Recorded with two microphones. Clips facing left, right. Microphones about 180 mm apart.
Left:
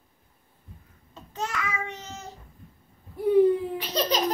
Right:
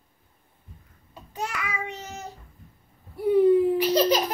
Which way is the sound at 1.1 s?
10° right (ahead or behind).